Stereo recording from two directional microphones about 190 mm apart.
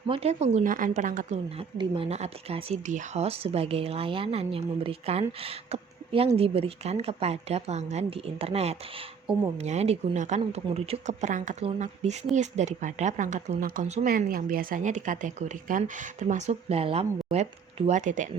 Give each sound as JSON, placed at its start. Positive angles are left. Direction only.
{"t": 0.1, "sound": "speech", "side_deg": -35}
{"t": 1.8, "sound": "speech", "side_deg": -25}